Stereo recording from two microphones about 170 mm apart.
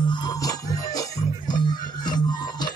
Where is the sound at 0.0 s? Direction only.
25° left (ahead or behind).